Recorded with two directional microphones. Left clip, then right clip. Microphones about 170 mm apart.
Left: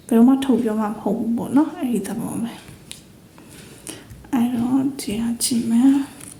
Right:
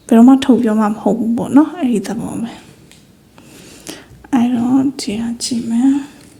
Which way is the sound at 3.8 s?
30° right (ahead or behind).